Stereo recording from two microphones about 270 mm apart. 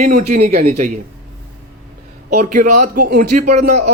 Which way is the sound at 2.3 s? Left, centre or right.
Right.